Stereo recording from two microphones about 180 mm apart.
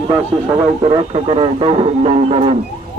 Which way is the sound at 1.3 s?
30° right (ahead or behind).